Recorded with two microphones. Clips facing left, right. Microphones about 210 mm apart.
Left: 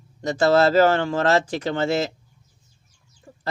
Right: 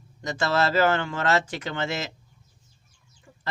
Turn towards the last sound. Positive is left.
turn(degrees=35)  # may be behind; listen again after turning